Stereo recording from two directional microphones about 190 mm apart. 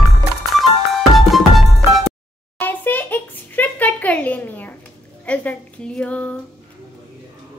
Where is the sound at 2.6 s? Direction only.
10° left (ahead or behind).